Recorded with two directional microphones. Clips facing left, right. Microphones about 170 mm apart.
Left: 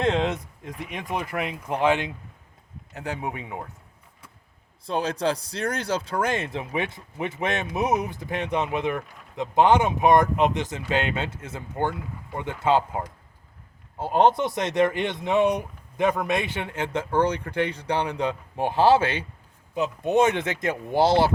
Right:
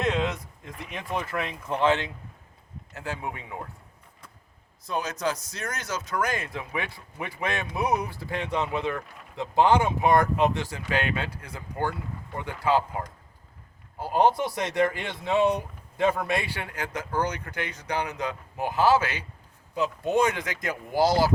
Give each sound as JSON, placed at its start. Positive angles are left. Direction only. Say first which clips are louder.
{"t": 0.0, "sound": "speech", "louder": "left 3 dB", "side_deg": 25}
{"t": 4.9, "sound": "speech", "louder": "left 4 dB", "side_deg": 30}
{"t": 14.0, "sound": "speech", "louder": "left 3 dB", "side_deg": 20}